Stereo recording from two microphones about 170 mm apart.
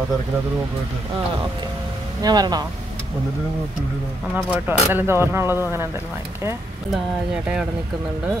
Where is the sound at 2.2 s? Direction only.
25° right (ahead or behind).